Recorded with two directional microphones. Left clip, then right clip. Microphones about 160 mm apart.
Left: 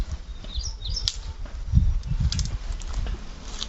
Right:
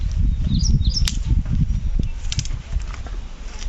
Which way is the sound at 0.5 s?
90° right.